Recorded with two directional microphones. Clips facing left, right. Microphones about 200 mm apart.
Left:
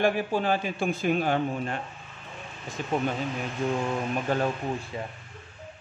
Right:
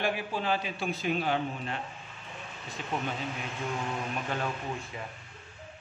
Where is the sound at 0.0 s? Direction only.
45° left (ahead or behind).